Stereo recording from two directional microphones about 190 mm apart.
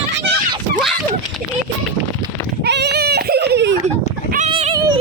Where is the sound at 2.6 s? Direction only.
60° right (ahead or behind).